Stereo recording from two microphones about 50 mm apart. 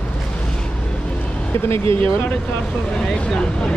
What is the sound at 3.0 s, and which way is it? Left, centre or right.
Speech, centre.